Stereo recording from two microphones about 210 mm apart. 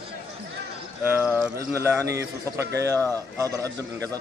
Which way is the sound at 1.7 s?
15° right (ahead or behind).